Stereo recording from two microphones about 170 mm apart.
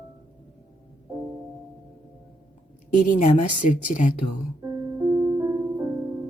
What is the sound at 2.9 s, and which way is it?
Speech, 50° left (ahead or behind).